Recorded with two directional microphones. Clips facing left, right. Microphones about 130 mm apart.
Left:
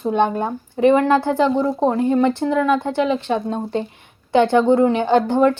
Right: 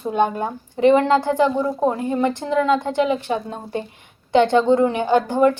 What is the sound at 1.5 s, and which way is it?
Speech, 20° left (ahead or behind).